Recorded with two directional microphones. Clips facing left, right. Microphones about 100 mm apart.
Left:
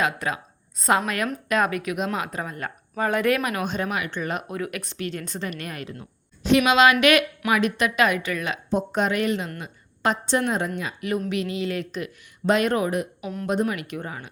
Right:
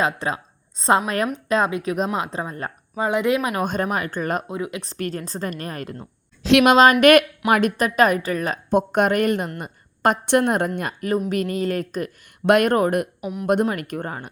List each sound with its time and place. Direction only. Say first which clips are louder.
0.0 s a woman's voice: right 2 dB; 35° right (ahead or behind)
2.9 s speech: right 2 dB; 20° right (ahead or behind)
3.6 s a woman's voice: right 4 dB; 45° right (ahead or behind)
4.4 s speech: right 2 dB; 20° right (ahead or behind)
4.9 s a woman's voice: right 3 dB; 40° right (ahead or behind)
6.4 s a woman's voice: right 4 dB; 90° right
6.7 s a woman's voice: right 5 dB; 45° right (ahead or behind)
8.7 s a woman's voice: right 5 dB; 60° right (ahead or behind)
12.5 s speech: right 5 dB; 55° right (ahead or behind)
13.2 s speech: right 3 dB; 15° right (ahead or behind)
13.7 s a woman's voice: right 3 dB; 45° right (ahead or behind)